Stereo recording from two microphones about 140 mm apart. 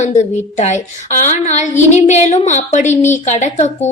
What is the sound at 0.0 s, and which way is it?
A woman's voice, 55° left (ahead or behind).